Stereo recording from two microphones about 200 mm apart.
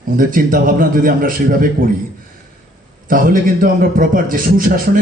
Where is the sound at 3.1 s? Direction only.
45° right (ahead or behind).